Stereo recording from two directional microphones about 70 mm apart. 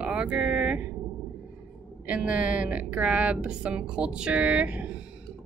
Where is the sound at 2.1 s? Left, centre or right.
Centre.